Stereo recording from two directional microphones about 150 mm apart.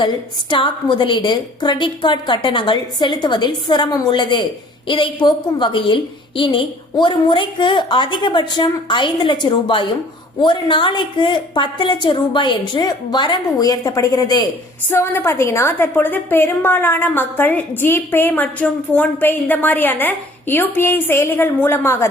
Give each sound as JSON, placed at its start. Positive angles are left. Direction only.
{"t": 0.5, "sound": "a woman's voice", "side_deg": 35}
{"t": 14.8, "sound": "a woman's voice", "side_deg": 15}